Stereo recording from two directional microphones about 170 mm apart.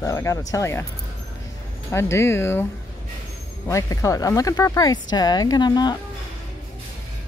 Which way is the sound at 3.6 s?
20° left (ahead or behind).